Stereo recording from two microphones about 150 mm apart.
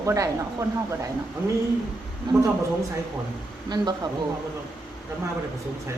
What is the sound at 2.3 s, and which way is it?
Speech, 30° right (ahead or behind).